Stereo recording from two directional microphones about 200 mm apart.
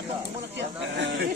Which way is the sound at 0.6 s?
60° right (ahead or behind).